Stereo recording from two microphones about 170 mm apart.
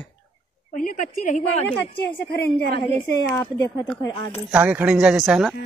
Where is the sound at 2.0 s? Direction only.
70° left (ahead or behind).